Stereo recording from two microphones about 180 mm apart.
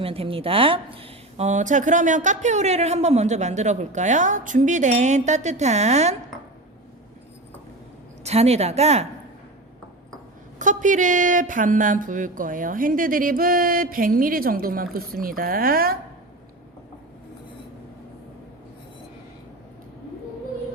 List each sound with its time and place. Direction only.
0.0 s speech: 30° right (ahead or behind)
8.2 s speech: 35° right (ahead or behind)
10.6 s speech: 45° right (ahead or behind)